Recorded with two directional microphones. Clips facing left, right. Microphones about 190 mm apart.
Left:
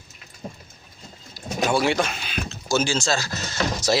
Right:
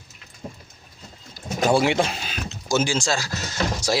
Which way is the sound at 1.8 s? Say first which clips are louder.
Right 1 dB; 20° right (ahead or behind).